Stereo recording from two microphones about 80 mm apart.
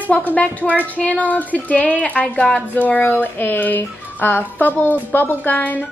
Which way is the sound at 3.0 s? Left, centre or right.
Left.